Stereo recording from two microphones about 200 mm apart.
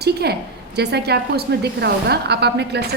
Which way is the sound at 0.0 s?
55° right (ahead or behind).